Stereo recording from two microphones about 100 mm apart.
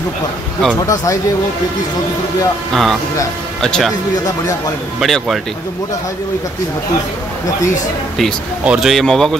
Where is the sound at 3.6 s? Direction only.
5° left (ahead or behind).